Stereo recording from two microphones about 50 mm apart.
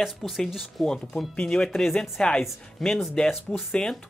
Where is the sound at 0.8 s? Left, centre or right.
Centre.